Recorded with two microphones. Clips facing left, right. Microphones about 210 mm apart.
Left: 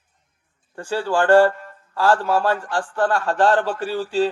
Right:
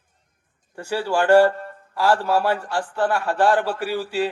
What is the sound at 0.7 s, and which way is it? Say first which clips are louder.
A man's voice: left 1 dB; 10° right (ahead or behind).